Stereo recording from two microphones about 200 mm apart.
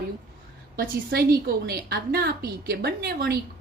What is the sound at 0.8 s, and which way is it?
A woman's voice, 50° right (ahead or behind).